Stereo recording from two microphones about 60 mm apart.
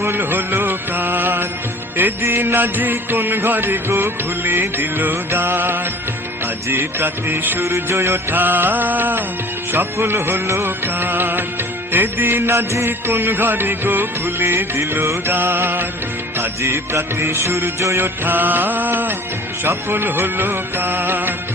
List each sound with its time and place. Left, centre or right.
0.0 s music: right
8.4 s music: right
15.3 s music: right
16.4 s music: right
18.0 s music: right